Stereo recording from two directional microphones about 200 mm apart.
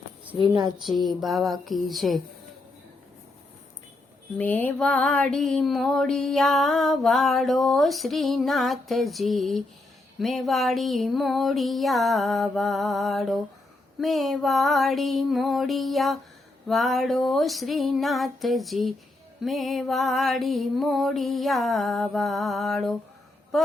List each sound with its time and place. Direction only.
0.4 s speech: 25° right (ahead or behind)
0.8 s mantra: centre (ahead or behind)
4.4 s mantra: 10° left (ahead or behind)
23.5 s a sound: centre (ahead or behind)